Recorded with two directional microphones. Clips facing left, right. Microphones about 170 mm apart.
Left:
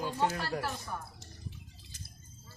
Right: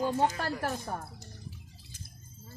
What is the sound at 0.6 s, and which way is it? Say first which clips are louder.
Speech: right 4 dB; 45° right (ahead or behind).